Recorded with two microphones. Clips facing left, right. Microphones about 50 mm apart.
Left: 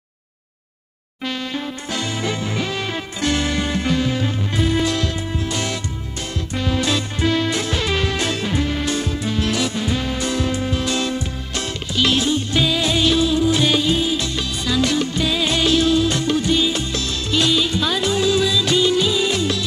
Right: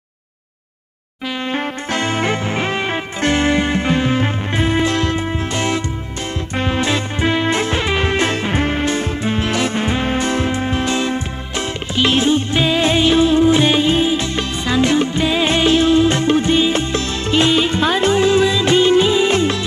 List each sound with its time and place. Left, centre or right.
1.5 s music: right